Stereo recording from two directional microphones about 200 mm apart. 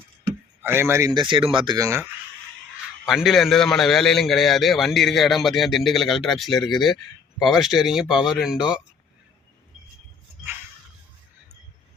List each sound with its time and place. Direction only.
0.6 s speech: 10° right (ahead or behind)
3.1 s a man's voice: centre (ahead or behind)